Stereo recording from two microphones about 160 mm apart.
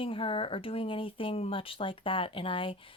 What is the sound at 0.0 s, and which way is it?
Speech, 35° left (ahead or behind).